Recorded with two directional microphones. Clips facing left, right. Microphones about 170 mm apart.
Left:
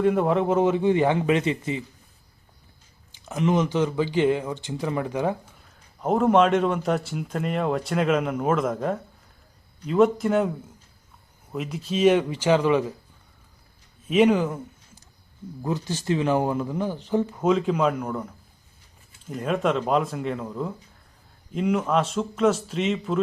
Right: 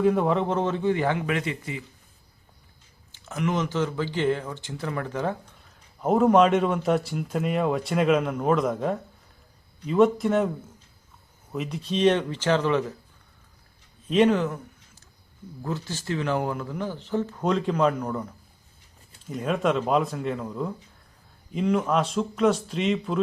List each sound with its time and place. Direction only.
0.0 s speech: centre (ahead or behind); by 1.8 s 20° left (ahead or behind)
3.1 s speech: 15° left (ahead or behind)
5.6 s a man's voice: centre (ahead or behind)
11.5 s speech: centre (ahead or behind)
14.1 s a man's voice: 5° left (ahead or behind)
14.4 s a sound: 20° left (ahead or behind)
15.6 s a man's voice: 15° left (ahead or behind); by 23.2 s centre (ahead or behind)